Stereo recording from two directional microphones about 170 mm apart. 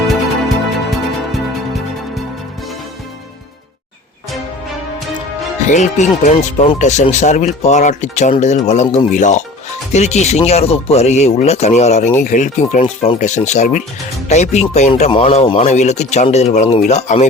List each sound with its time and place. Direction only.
0.1 s music: centre (ahead or behind)
5.6 s speech: 45° left (ahead or behind)